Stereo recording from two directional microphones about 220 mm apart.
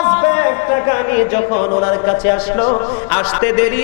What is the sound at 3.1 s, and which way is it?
Speech, 15° left (ahead or behind).